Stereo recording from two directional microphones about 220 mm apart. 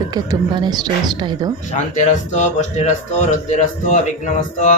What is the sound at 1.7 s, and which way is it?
A man's voice, 35° left (ahead or behind).